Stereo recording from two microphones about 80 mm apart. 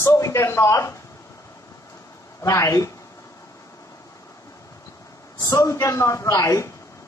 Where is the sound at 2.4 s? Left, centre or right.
Left.